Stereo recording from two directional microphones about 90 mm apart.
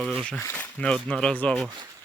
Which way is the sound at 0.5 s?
20° left (ahead or behind).